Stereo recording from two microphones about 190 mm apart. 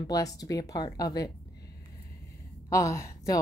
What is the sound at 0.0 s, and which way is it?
A woman's voice, 20° left (ahead or behind).